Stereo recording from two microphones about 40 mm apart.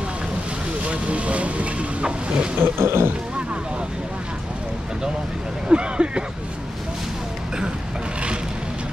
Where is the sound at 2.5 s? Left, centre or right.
Right.